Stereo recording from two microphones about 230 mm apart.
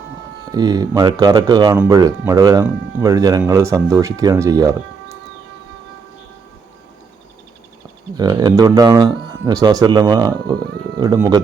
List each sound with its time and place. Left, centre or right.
0.5 s speech: centre
8.1 s speech: centre